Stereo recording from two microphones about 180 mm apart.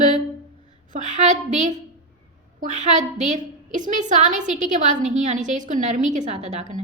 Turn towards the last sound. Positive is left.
turn(degrees=-40)  # may be behind; listen again after turning